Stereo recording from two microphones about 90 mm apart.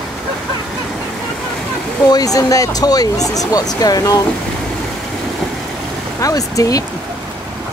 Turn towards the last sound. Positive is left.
turn(degrees=40)  # may be behind; listen again after turning